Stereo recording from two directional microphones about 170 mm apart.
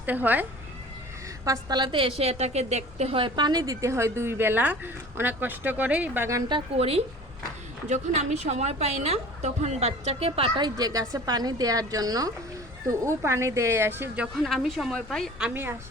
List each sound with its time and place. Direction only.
0.0 s speech: 10° right (ahead or behind)
1.5 s a woman's voice: 25° right (ahead or behind)
6.5 s a woman's voice: 35° right (ahead or behind); by 14.3 s 15° right (ahead or behind)
14.3 s a woman's voice: centre (ahead or behind)